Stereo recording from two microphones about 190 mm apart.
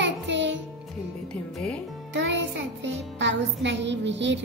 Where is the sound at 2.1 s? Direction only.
70° right (ahead or behind).